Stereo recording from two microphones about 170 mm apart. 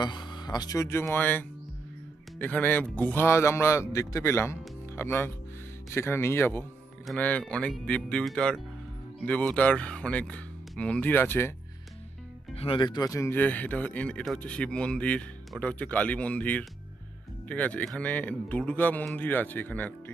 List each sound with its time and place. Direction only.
0.0 s speech: 25° left (ahead or behind)
12.5 s speech: 30° left (ahead or behind); by 19.9 s 10° left (ahead or behind)